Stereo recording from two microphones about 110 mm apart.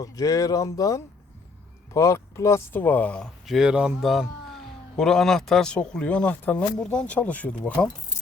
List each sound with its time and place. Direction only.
0.0 s speech: 35° left (ahead or behind); by 3.2 s 10° left (ahead or behind)
3.4 s speech: 5° right (ahead or behind); by 7.9 s 15° left (ahead or behind)